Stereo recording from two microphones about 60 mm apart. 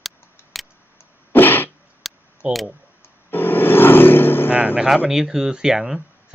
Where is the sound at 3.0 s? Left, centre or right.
Left.